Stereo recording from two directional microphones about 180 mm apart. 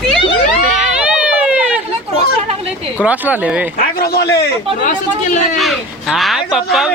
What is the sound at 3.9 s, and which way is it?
Speech, 60° left (ahead or behind).